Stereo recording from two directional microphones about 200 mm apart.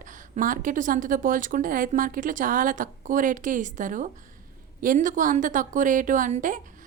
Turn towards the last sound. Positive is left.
turn(degrees=-40)  # may be behind; listen again after turning